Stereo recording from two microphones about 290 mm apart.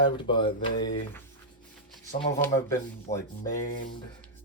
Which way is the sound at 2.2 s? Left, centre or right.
Centre.